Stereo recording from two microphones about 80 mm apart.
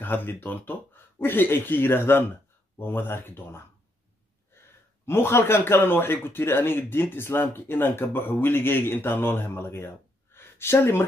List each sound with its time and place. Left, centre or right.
0.0 s a man's voice: left